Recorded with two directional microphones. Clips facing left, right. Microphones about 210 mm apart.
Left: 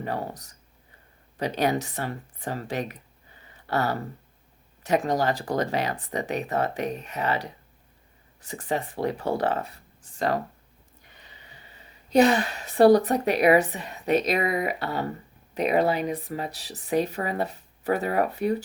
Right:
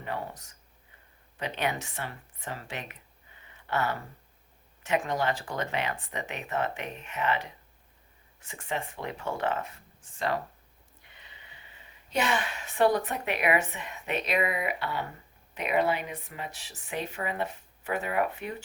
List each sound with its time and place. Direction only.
0.0 s speech: 40° left (ahead or behind)
3.4 s a sound: 35° left (ahead or behind)
4.8 s speech: 40° left (ahead or behind)